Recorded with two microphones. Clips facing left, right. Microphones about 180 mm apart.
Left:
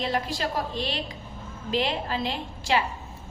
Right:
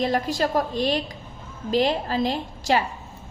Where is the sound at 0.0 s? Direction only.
45° right (ahead or behind).